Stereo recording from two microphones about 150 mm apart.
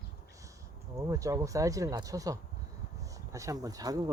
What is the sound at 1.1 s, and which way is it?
Speech, 20° right (ahead or behind).